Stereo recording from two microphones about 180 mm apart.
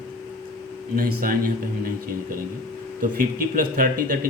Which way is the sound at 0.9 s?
55° right (ahead or behind).